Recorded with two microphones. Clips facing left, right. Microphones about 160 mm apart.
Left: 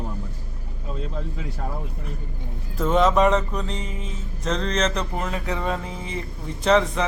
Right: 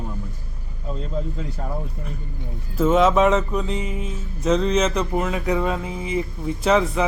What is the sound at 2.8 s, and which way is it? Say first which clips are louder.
Music: right 2 dB; centre (ahead or behind).